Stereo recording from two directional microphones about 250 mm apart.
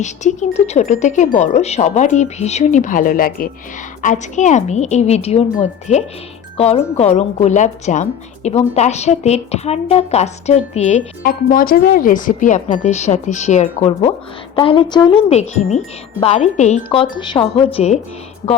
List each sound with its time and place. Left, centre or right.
0.0 s speech: left